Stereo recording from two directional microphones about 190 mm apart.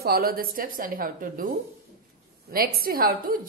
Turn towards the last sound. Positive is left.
turn(degrees=-50)  # may be behind; listen again after turning